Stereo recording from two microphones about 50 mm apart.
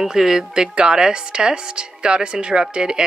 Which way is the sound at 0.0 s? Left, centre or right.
Centre.